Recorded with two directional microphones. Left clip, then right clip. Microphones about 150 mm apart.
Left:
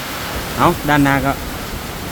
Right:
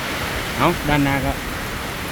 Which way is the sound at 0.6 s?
10° left (ahead or behind).